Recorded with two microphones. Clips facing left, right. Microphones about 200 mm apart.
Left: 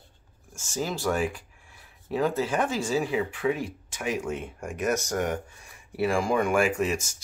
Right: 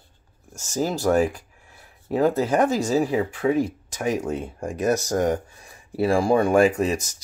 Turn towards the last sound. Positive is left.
turn(degrees=-35)  # may be behind; listen again after turning